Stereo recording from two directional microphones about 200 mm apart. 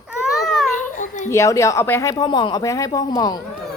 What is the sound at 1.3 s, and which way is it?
Speech, 15° left (ahead or behind).